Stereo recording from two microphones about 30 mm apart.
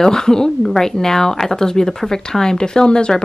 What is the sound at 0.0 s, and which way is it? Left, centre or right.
Speech, centre.